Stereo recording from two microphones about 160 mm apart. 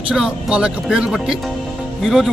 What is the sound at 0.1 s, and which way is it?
Speech, 5° right (ahead or behind).